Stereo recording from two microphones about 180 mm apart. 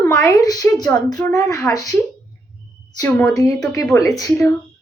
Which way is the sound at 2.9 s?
15° left (ahead or behind).